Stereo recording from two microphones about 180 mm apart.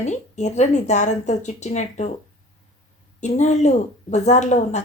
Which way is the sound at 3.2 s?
40° left (ahead or behind).